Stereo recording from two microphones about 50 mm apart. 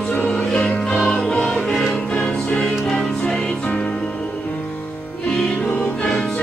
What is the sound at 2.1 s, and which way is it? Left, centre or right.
Music, centre.